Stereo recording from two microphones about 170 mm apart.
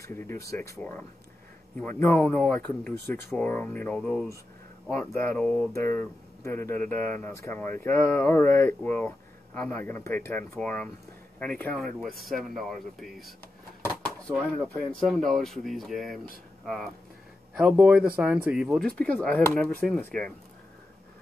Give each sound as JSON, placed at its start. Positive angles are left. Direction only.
{"t": 0.0, "sound": "speech", "side_deg": 15}
{"t": 18.8, "sound": "speech", "side_deg": 5}